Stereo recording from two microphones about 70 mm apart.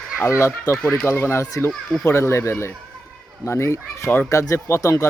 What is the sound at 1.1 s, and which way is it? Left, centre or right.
Speech, left.